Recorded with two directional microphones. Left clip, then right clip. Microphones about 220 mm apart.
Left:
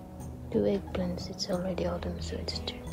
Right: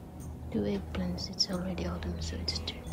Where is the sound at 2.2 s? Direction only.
5° right (ahead or behind).